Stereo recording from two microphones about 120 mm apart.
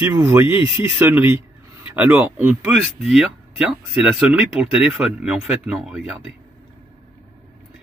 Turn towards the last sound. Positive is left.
turn(degrees=-5)  # may be behind; listen again after turning